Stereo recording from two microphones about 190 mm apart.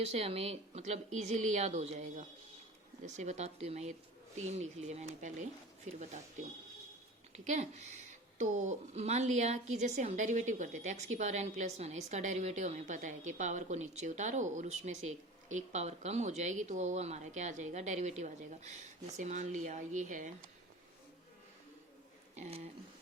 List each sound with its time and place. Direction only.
0.0 s a woman's voice: 35° right (ahead or behind)
22.4 s a woman's voice: 35° right (ahead or behind)